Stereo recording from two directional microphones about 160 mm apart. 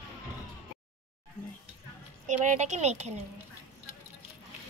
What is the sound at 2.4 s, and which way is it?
Speech, 50° right (ahead or behind).